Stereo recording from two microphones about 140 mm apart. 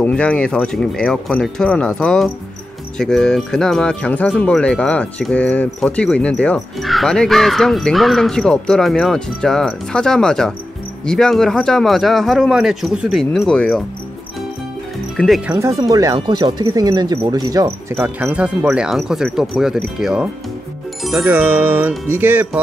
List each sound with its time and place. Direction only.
0.0 s speech: 10° left (ahead or behind)
15.1 s speech: centre (ahead or behind)
15.5 s speech: 25° right (ahead or behind)
17.9 s speech: 10° right (ahead or behind)
21.0 s music: 5° right (ahead or behind)
21.3 s music: 15° right (ahead or behind)